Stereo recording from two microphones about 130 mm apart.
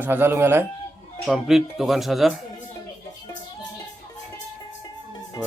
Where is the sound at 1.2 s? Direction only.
5° right (ahead or behind).